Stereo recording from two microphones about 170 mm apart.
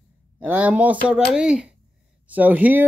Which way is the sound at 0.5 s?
10° right (ahead or behind).